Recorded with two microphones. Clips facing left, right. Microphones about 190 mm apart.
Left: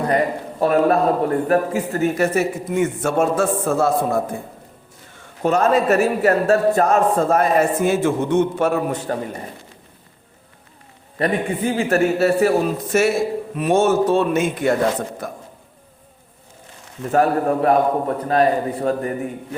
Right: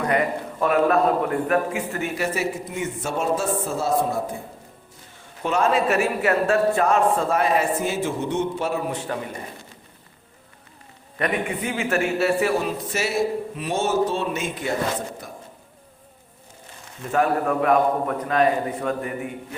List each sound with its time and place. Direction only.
0.0 s a man's voice: 35° left (ahead or behind); by 4.2 s 55° left (ahead or behind)
5.4 s a man's voice: 40° left (ahead or behind)
11.2 s a man's voice: 35° left (ahead or behind); by 15.4 s 55° left (ahead or behind)
17.1 s a man's voice: 35° left (ahead or behind)